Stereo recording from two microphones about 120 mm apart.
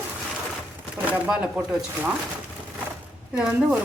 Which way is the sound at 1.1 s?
10° right (ahead or behind).